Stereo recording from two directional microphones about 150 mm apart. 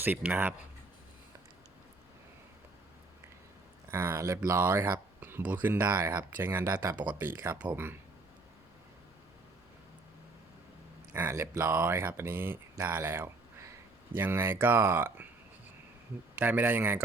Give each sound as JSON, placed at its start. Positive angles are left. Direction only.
{"t": 0.0, "sound": "speech", "side_deg": -10}
{"t": 3.9, "sound": "speech", "side_deg": -15}
{"t": 11.1, "sound": "speech", "side_deg": -15}
{"t": 16.3, "sound": "speech", "side_deg": -10}